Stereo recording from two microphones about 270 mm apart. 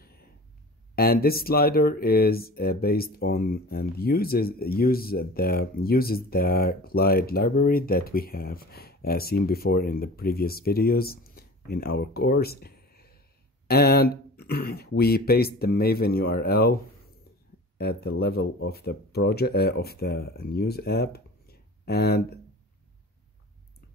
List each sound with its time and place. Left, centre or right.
0.9 s speech: left